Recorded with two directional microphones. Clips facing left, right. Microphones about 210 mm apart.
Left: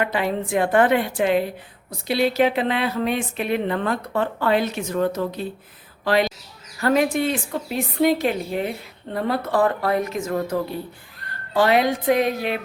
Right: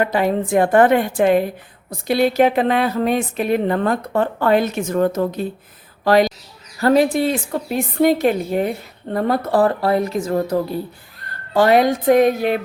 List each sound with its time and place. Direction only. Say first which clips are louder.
0.0 s a woman's voice: right 5 dB; 45° right (ahead or behind)